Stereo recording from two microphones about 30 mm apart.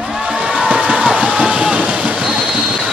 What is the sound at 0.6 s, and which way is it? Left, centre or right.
Crowd, right.